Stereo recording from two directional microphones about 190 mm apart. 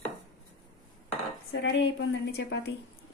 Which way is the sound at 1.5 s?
70° left (ahead or behind).